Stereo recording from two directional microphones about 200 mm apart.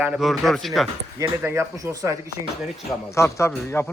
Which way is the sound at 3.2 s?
15° left (ahead or behind).